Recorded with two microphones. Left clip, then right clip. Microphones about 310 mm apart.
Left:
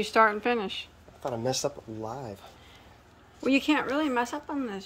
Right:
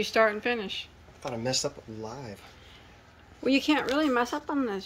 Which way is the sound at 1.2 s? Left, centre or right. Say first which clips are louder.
Left 2 dB; left.